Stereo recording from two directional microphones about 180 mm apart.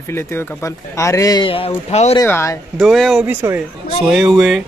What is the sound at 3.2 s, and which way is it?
A man's voice, 10° right (ahead or behind).